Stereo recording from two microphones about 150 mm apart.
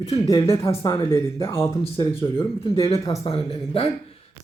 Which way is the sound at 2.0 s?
35° left (ahead or behind).